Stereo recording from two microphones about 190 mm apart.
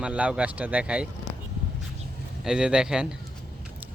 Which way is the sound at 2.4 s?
5° right (ahead or behind).